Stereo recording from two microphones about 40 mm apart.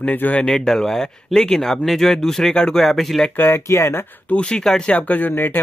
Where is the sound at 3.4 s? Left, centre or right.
Left.